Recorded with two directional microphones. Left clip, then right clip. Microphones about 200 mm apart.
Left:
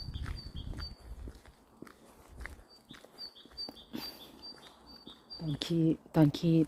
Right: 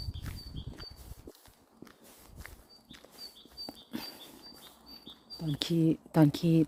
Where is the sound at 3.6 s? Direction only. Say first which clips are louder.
Right 3 dB; 20° right (ahead or behind).